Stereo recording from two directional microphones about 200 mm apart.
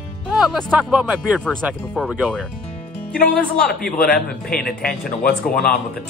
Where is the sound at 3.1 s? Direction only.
45° left (ahead or behind).